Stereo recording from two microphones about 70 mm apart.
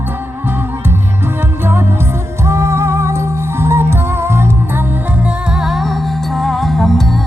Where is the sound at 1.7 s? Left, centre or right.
Right.